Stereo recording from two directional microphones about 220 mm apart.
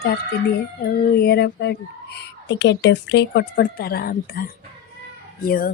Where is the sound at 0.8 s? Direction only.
45° left (ahead or behind).